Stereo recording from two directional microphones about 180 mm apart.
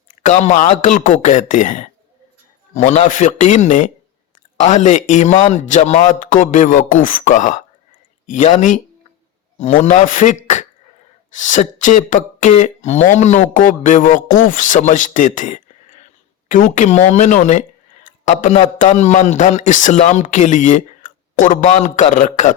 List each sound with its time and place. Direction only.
0.2 s speech: 40° left (ahead or behind)